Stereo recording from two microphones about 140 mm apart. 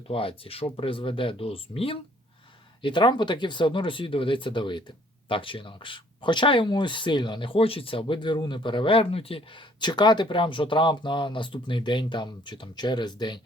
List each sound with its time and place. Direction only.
0.1 s speech: 40° left (ahead or behind)